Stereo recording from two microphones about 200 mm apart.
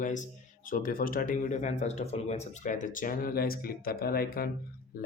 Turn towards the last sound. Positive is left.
turn(degrees=45)  # may be behind; listen again after turning